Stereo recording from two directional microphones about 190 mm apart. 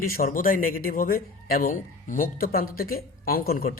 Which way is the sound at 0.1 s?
50° left (ahead or behind).